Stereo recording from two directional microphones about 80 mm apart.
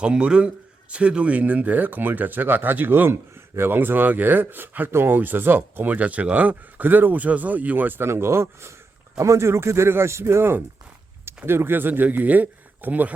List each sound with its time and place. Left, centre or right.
0.0 s speech: centre